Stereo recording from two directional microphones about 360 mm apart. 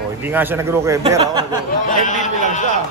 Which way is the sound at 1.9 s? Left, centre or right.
Left.